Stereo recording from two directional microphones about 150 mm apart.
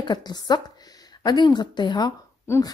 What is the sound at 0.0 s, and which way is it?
Speech, 30° left (ahead or behind).